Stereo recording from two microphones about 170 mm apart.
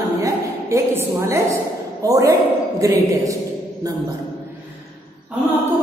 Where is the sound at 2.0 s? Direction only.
20° right (ahead or behind).